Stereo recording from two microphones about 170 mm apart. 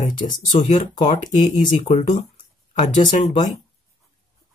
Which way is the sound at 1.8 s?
45° left (ahead or behind).